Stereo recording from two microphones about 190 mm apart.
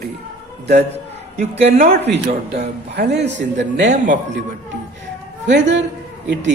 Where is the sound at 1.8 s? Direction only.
55° right (ahead or behind); by 3.8 s 70° right (ahead or behind).